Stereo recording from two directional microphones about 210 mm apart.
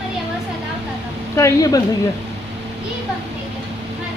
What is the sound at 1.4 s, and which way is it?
Speech, 15° left (ahead or behind).